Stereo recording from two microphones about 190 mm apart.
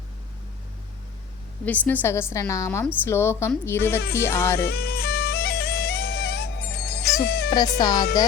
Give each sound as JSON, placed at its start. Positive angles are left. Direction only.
{"t": 1.6, "sound": "a woman's voice", "side_deg": 10}
{"t": 4.7, "sound": "music", "side_deg": 55}
{"t": 7.8, "sound": "speech", "side_deg": 20}